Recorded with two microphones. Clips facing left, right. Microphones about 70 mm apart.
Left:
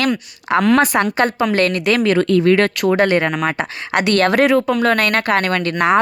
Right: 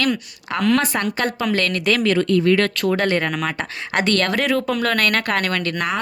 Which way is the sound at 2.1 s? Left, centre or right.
Left.